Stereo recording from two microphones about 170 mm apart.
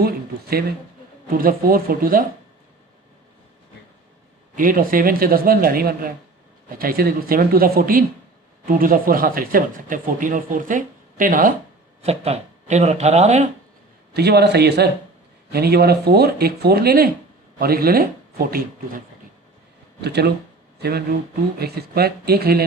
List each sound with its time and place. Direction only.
1.3 s speech: 55° right (ahead or behind)
4.5 s speech: 55° right (ahead or behind)
12.0 s speech: 35° right (ahead or behind)
14.1 s speech: 75° right (ahead or behind)
20.0 s speech: 75° right (ahead or behind)